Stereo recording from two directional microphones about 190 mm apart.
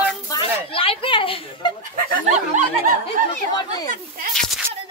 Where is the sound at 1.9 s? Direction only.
40° right (ahead or behind).